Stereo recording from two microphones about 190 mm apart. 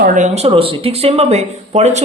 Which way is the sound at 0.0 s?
45° right (ahead or behind).